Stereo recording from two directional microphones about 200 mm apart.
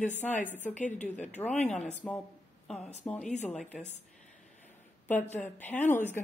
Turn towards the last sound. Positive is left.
turn(degrees=10)  # may be behind; listen again after turning